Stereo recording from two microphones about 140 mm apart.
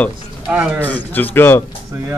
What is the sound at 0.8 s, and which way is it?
Speech, 10° left (ahead or behind).